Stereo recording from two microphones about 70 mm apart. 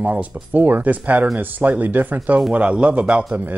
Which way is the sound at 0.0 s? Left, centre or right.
Right.